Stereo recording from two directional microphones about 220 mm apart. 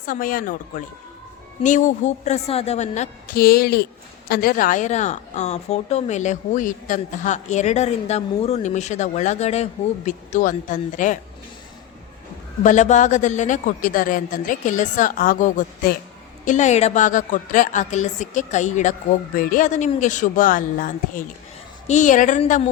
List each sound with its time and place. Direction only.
0.0 s speech: 40° left (ahead or behind)
12.6 s speech: 35° left (ahead or behind)